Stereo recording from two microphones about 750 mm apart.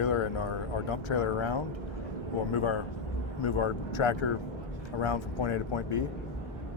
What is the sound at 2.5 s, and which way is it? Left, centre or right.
A man's voice, left.